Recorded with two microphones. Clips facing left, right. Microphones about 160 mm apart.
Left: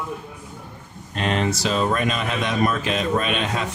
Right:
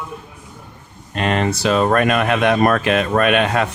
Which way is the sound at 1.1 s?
65° right (ahead or behind).